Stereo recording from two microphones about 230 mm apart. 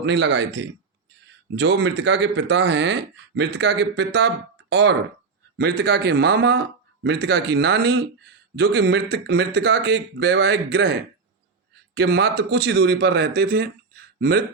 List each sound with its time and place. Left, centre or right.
0.0 s speech: right
11.9 s speech: right